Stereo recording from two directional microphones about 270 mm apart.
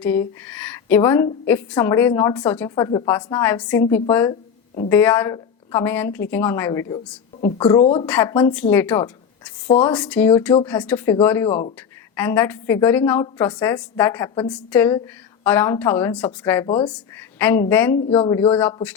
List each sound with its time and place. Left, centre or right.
0.0 s a woman's voice: centre
8.0 s a woman's voice: centre
16.6 s speech: centre
17.3 s a woman's voice: centre